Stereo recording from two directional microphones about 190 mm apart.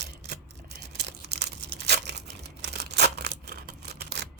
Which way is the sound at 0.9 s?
60° right (ahead or behind).